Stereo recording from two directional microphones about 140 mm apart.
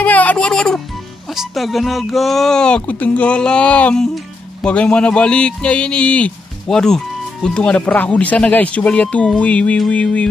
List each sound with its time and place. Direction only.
0.0 s speech: 10° left (ahead or behind)